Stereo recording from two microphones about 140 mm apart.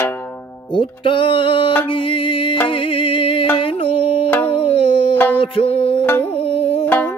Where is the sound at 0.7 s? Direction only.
40° left (ahead or behind).